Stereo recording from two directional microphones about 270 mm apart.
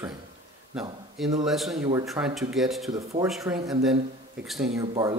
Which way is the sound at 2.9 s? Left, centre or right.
Centre.